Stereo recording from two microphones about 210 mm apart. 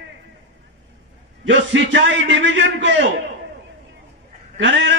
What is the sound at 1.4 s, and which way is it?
A man's voice, 60° right (ahead or behind).